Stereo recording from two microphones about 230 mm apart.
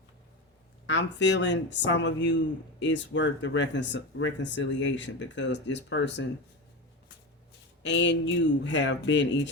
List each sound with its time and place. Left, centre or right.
0.9 s speech: left
7.8 s speech: left